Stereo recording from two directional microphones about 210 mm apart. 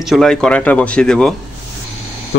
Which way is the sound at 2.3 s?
55° left (ahead or behind).